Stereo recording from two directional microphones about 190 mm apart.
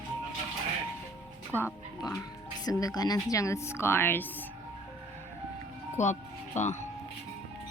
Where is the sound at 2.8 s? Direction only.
20° left (ahead or behind).